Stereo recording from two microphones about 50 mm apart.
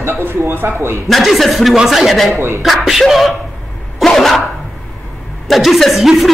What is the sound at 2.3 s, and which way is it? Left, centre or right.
Speech, right.